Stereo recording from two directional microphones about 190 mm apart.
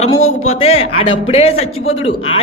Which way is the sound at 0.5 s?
30° left (ahead or behind).